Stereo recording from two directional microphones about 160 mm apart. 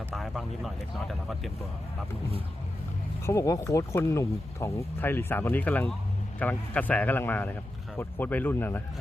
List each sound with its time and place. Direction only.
0.1 s speech: centre (ahead or behind)
3.2 s speech: 20° left (ahead or behind)